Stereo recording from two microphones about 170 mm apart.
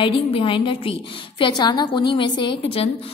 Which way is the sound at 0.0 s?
30° left (ahead or behind).